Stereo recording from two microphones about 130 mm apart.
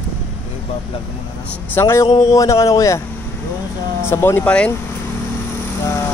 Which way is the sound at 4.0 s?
20° left (ahead or behind).